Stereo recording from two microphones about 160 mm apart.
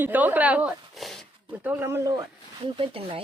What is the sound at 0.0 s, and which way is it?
Speech, 10° right (ahead or behind).